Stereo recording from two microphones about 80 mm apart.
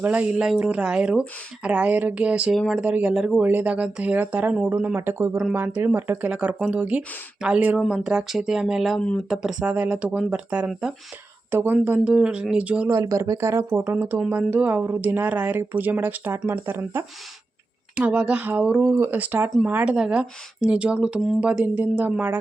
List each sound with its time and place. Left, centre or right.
0.0 s speech: centre
3.4 s speech: right
6.2 s speech: centre
7.8 s speech: centre
11.5 s speech: right
12.9 s speech: right
13.9 s speech: right
17.9 s speech: centre